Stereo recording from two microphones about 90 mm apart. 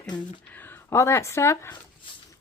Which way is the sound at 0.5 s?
20° left (ahead or behind).